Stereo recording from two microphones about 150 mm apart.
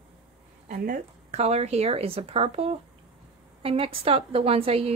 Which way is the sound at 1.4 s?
45° right (ahead or behind).